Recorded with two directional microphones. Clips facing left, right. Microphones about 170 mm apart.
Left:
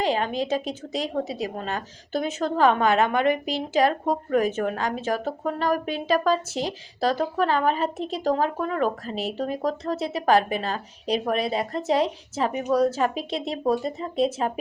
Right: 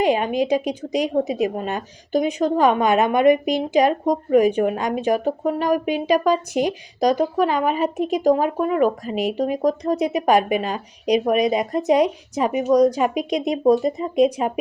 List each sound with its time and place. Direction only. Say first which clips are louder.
0.0 s a woman's voice: right 5 dB; 15° right (ahead or behind)